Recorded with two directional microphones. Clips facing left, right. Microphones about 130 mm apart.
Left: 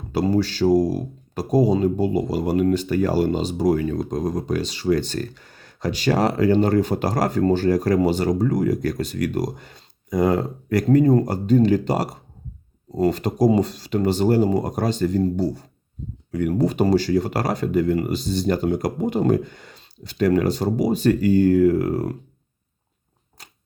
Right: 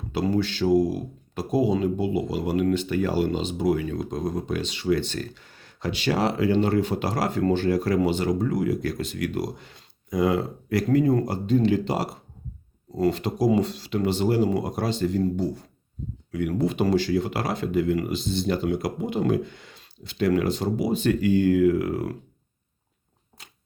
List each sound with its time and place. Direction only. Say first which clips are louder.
0.1 s speech: left 4 dB; 40° left (ahead or behind)
23.4 s biting: left 3 dB; 40° left (ahead or behind)